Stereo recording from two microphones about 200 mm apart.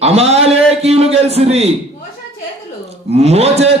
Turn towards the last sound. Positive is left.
turn(degrees=-30)  # may be behind; listen again after turning